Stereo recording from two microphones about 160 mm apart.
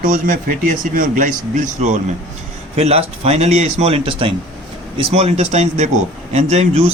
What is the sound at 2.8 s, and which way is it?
Speech, 40° right (ahead or behind).